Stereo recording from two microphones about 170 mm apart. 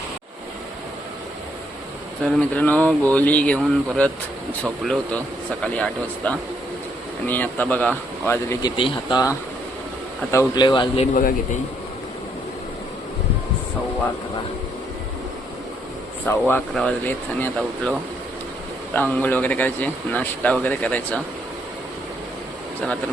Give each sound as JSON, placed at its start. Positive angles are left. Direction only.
{"t": 2.2, "sound": "speech", "side_deg": 10}
{"t": 8.7, "sound": "speech", "side_deg": 30}
{"t": 10.3, "sound": "speech", "side_deg": 25}
{"t": 11.1, "sound": "a man's voice", "side_deg": 55}
{"t": 16.2, "sound": "speech", "side_deg": 10}
{"t": 18.9, "sound": "speech", "side_deg": 10}